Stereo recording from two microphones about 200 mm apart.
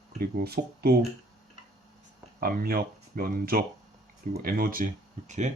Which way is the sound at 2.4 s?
45° right (ahead or behind).